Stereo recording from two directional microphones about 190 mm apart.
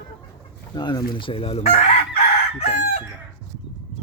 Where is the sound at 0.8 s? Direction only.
20° left (ahead or behind).